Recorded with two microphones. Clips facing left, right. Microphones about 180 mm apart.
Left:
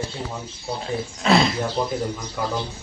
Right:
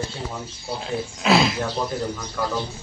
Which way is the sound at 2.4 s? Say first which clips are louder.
Right 1 dB; 15° left (ahead or behind).